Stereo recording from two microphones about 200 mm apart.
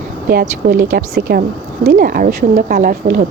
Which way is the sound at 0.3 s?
45° right (ahead or behind).